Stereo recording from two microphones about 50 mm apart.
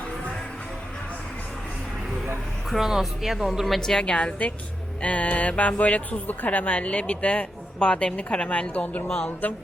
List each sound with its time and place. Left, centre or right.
2.6 s speech: centre
3.8 s speech: centre; by 9.0 s left
9.0 s speech: left